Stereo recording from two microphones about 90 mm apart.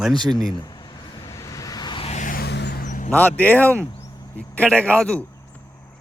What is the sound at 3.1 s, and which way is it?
A man's voice, 20° left (ahead or behind).